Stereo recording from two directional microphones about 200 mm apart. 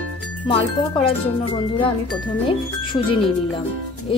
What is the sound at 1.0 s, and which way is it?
Speech, 25° left (ahead or behind).